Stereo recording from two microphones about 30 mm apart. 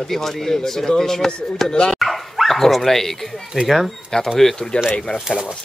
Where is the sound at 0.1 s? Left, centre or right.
Centre.